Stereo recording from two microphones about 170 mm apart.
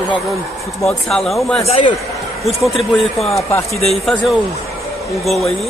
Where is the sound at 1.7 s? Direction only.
30° left (ahead or behind).